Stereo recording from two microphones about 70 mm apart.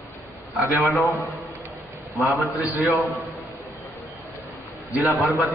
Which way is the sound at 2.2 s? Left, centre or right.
Centre.